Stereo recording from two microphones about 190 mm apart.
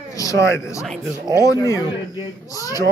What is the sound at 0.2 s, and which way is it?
Speech, 15° left (ahead or behind).